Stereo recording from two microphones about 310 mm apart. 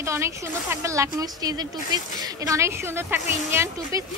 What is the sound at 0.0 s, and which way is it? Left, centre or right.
A woman's voice, centre.